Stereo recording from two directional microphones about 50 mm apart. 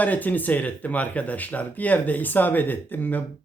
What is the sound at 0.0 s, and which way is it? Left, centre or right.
Speech, left.